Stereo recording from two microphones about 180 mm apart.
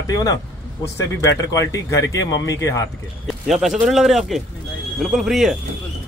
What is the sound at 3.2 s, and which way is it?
Speech, centre (ahead or behind).